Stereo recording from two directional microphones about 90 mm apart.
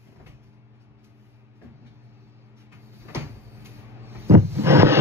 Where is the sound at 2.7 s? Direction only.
30° right (ahead or behind).